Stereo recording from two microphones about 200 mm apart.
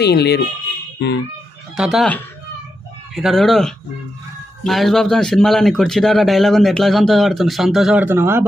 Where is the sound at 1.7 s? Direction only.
Centre (ahead or behind).